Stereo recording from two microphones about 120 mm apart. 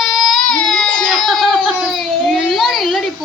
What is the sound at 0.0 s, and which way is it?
Baby cry, centre (ahead or behind).